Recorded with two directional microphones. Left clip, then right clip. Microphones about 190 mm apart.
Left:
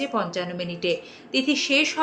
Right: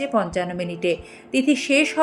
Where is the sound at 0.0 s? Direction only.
45° right (ahead or behind).